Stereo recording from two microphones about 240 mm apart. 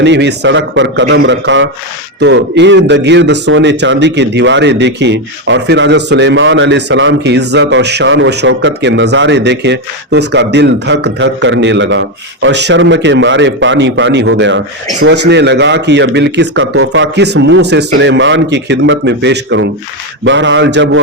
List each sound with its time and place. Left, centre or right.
0.0 s a man's voice: right